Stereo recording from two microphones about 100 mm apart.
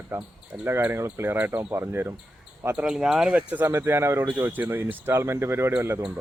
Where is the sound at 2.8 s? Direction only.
5° right (ahead or behind).